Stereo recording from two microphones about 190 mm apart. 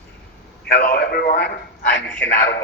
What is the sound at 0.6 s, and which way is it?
Speech, 55° left (ahead or behind).